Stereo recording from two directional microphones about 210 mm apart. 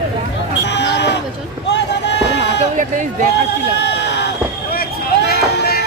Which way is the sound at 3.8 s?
55° left (ahead or behind).